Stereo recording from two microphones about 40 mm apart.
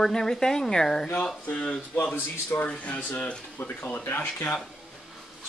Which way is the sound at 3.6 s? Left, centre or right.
Left.